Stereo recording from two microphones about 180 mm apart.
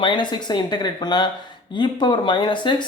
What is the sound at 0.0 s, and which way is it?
Speech, 25° left (ahead or behind).